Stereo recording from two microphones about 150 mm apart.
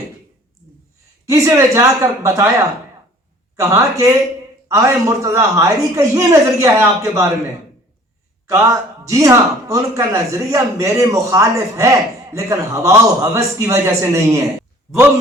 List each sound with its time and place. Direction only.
1.2 s speech: 20° right (ahead or behind)
8.4 s speech: 20° right (ahead or behind)